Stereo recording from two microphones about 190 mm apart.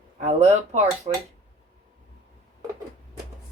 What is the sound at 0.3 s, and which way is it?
Speech, 35° right (ahead or behind).